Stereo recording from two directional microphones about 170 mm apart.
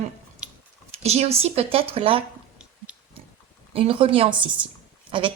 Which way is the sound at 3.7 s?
30° right (ahead or behind).